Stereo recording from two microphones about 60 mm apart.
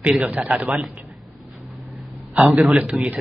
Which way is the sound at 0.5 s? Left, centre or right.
Centre.